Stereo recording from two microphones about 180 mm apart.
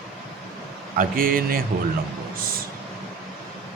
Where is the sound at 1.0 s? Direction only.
50° right (ahead or behind).